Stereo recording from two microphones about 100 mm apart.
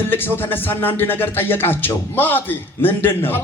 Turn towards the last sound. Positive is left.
turn(degrees=20)  # may be behind; listen again after turning